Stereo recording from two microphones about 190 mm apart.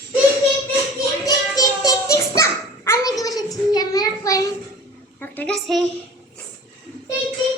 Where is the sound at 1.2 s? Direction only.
20° left (ahead or behind).